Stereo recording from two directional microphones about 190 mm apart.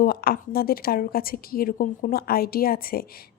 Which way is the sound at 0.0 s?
55° left (ahead or behind).